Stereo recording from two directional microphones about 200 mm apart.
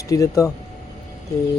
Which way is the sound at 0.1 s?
15° left (ahead or behind).